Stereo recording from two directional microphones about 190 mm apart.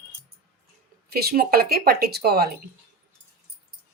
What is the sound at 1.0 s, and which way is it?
Speech, 55° right (ahead or behind).